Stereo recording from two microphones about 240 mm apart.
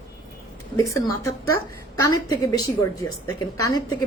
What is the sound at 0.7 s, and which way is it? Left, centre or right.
A woman's voice, centre.